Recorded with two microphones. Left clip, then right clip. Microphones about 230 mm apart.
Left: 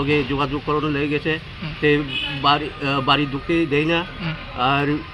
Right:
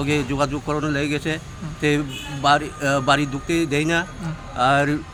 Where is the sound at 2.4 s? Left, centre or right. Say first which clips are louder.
Right 2 dB; centre.